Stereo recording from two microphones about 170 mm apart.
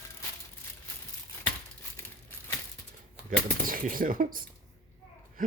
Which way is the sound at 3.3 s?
55° right (ahead or behind).